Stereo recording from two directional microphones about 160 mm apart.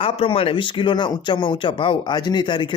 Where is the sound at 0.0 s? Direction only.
35° left (ahead or behind).